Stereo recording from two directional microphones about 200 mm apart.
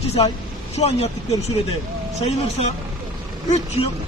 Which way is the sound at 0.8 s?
30° left (ahead or behind).